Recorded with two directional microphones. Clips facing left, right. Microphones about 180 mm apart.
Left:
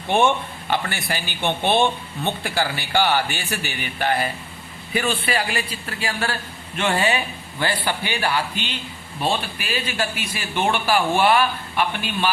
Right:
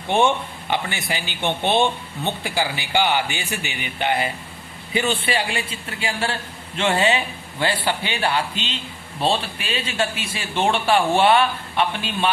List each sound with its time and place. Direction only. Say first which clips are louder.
0.7 s speech: even; 15° right (ahead or behind)